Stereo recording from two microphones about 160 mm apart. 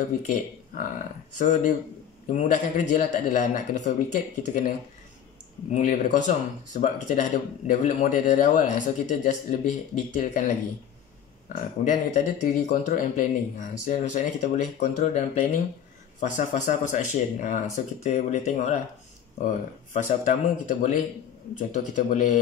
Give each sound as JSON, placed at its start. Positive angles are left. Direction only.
{"t": 0.7, "sound": "speech", "side_deg": 55}